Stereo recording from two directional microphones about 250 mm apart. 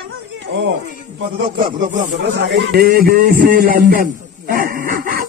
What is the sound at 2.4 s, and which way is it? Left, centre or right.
A man's voice, right.